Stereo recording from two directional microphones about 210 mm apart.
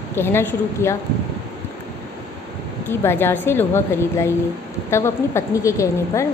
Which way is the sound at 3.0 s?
10° left (ahead or behind).